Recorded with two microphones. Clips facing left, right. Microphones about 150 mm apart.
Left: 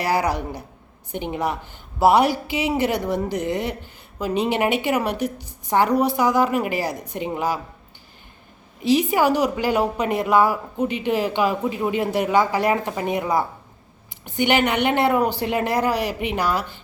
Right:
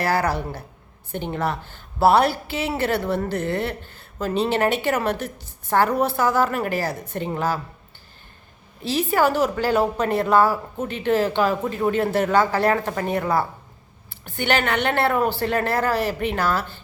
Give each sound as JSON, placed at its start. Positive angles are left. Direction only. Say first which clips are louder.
{"t": 0.0, "sound": "a woman's voice", "louder": "even", "side_deg": 15}
{"t": 8.8, "sound": "a woman's voice", "louder": "left 2 dB", "side_deg": 15}